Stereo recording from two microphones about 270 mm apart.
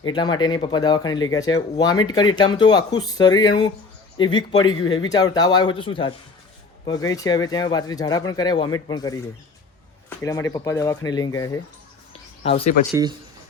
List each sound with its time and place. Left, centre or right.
0.0 s speech: centre
10.2 s speech: centre
12.4 s speech: left
12.9 s speech: centre